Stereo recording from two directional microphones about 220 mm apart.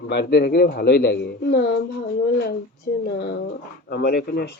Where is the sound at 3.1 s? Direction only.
50° left (ahead or behind).